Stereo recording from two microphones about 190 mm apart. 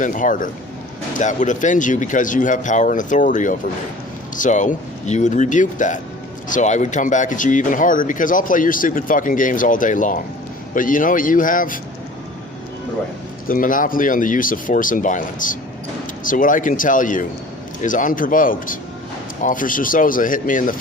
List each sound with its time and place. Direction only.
0.0 s speech: 45° left (ahead or behind)
13.5 s speech: 45° left (ahead or behind)